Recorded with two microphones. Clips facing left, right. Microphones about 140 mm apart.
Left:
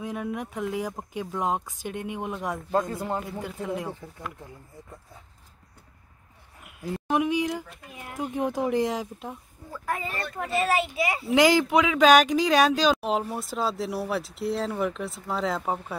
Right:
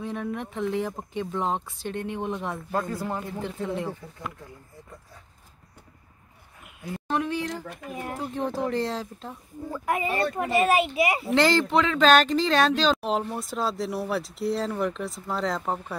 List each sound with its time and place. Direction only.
0.0 s speech: 5° left (ahead or behind)
2.7 s speech: 25° left (ahead or behind); by 4.3 s 5° left (ahead or behind)
6.8 s speech: 15° left (ahead or behind)
7.6 s speech: 70° right (ahead or behind)
7.9 s speech: 45° right (ahead or behind)
8.2 s speech: 15° left (ahead or behind)
10.0 s speech: 70° right (ahead or behind)
10.4 s a child's voice: 55° right (ahead or behind)
11.3 s speech: 10° left (ahead or behind)